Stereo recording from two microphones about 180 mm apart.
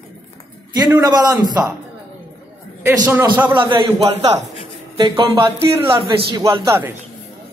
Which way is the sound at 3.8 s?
30° right (ahead or behind).